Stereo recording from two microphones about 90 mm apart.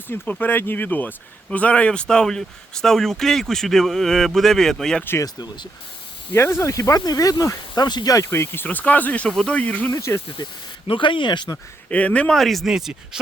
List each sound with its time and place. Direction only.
0.1 s speech: 20° left (ahead or behind)
5.2 s speech: 50° left (ahead or behind)
6.3 s speech: 30° left (ahead or behind); by 8.1 s 50° left (ahead or behind)
8.1 s speech: 35° left (ahead or behind); by 9.9 s 15° left (ahead or behind)
10.8 s speech: 70° left (ahead or behind)
11.5 s speech: 15° left (ahead or behind)
12.4 s speech: centre (ahead or behind)